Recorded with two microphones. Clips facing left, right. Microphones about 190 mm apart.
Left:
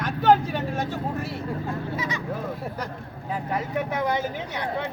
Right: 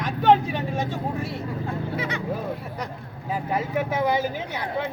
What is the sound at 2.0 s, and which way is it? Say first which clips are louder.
Vehicle: right 1 dB; 60° right (ahead or behind).